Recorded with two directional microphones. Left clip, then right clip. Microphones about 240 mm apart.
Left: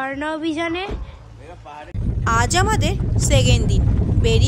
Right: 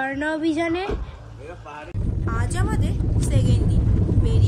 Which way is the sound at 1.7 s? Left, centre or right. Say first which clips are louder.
Left 3 dB; left.